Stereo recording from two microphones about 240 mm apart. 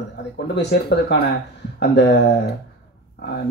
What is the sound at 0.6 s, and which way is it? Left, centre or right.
Speech, left.